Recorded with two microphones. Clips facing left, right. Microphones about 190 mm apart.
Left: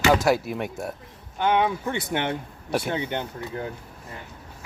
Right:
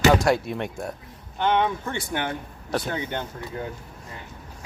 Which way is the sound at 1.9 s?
25° left (ahead or behind).